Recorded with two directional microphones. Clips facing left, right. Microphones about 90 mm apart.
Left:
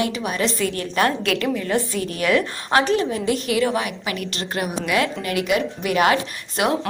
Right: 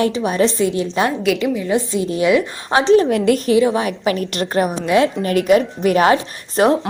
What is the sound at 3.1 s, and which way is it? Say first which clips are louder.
Speech: right 8 dB; 70° right (ahead or behind).